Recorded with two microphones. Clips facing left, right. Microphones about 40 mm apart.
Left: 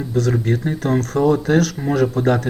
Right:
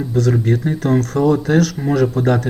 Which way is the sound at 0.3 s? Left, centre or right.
Centre.